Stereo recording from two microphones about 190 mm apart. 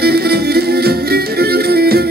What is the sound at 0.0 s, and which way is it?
Music, 55° right (ahead or behind).